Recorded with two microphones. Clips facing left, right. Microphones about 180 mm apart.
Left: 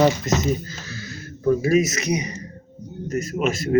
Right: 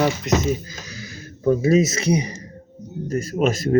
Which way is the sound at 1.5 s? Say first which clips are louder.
Right 1 dB; 25° right (ahead or behind).